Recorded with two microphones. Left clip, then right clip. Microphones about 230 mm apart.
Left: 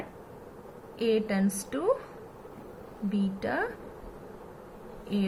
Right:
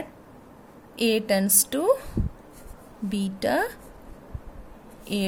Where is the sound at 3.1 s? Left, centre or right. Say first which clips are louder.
Right 6 dB; right.